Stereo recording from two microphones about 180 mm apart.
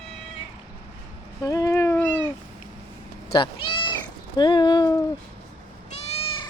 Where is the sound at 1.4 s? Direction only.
20° left (ahead or behind).